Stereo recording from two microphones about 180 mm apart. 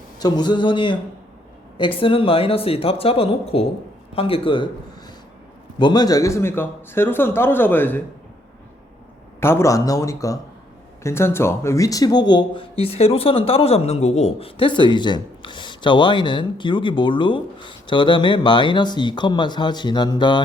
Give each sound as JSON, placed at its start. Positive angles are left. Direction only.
{"t": 0.2, "sound": "speech", "side_deg": 20}
{"t": 2.0, "sound": "speech", "side_deg": 30}
{"t": 5.8, "sound": "speech", "side_deg": 25}
{"t": 9.4, "sound": "speech", "side_deg": 15}